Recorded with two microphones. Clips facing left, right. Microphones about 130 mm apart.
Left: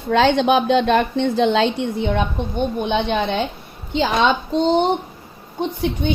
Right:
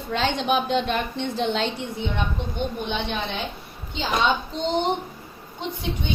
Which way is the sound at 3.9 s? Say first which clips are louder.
Left 6 dB; 90° left.